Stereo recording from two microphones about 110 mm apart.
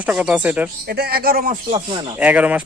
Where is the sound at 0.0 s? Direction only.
10° right (ahead or behind).